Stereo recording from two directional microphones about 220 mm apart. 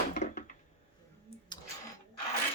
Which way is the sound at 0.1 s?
35° left (ahead or behind).